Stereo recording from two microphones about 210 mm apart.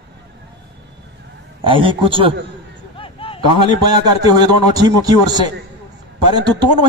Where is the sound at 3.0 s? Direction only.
25° left (ahead or behind).